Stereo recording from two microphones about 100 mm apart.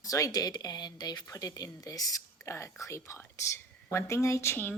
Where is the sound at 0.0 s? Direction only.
35° left (ahead or behind).